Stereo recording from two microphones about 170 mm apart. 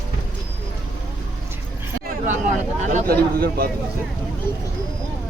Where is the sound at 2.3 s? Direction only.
45° right (ahead or behind).